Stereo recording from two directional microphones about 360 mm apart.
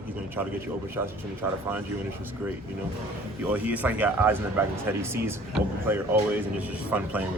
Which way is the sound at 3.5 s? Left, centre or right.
Centre.